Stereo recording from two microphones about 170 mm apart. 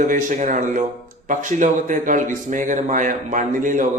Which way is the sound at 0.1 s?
50° right (ahead or behind).